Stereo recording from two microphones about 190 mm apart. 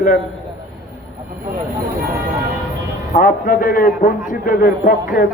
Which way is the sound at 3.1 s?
45° left (ahead or behind).